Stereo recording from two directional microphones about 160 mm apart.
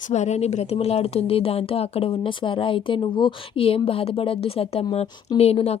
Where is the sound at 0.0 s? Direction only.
45° left (ahead or behind).